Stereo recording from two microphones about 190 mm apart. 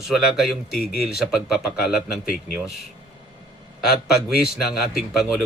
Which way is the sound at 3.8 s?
5° right (ahead or behind).